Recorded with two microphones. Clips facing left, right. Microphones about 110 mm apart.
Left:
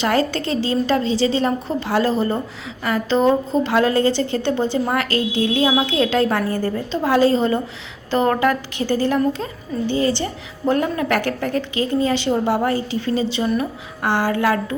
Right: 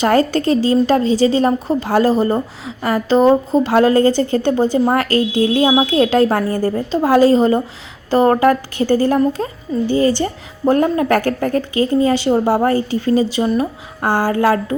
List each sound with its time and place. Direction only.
0.0 s a woman's voice: 45° right (ahead or behind)